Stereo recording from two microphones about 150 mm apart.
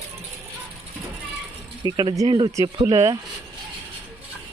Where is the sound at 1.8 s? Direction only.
30° right (ahead or behind).